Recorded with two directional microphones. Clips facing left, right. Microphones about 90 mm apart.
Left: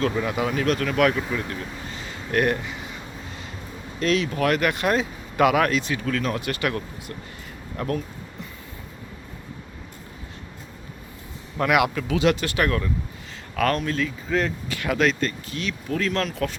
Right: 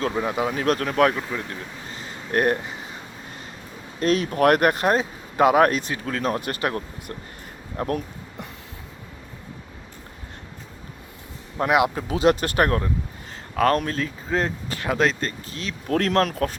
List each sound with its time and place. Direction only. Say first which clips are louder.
0.0 s speech: even; 25° right (ahead or behind)
1.1 s speech: left 2 dB; 15° right (ahead or behind)
2.0 s a sound: even; 35° right (ahead or behind)
4.0 s speech: right 3 dB; 45° right (ahead or behind)
11.6 s speech: right 1 dB; 30° right (ahead or behind)
15.9 s speech: right 6 dB; 60° right (ahead or behind)